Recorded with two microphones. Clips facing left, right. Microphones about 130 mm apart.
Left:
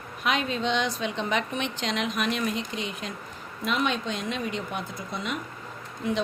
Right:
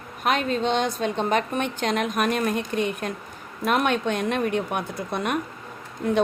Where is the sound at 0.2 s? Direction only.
45° right (ahead or behind).